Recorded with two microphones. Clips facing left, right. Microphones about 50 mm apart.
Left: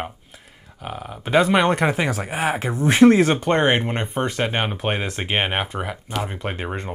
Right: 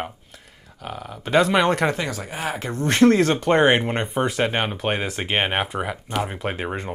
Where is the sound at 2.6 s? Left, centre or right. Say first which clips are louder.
Left 2 dB; centre.